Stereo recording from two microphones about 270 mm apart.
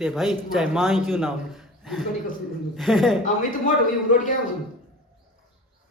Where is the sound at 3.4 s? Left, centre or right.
Left.